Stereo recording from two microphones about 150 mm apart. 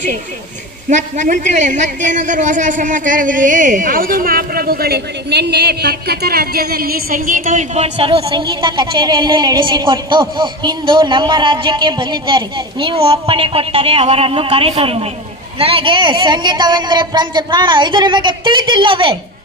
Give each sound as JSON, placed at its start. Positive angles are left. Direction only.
{"t": 0.9, "sound": "a woman's voice", "side_deg": -55}